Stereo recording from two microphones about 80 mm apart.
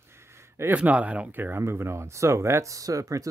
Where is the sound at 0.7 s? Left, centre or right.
Centre.